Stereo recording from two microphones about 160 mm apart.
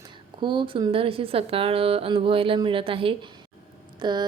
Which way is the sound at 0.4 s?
30° right (ahead or behind).